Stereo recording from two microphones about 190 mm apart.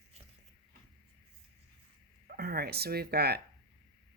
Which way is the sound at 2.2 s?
50° right (ahead or behind).